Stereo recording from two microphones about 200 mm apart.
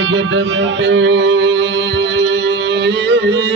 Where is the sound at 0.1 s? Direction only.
70° right (ahead or behind).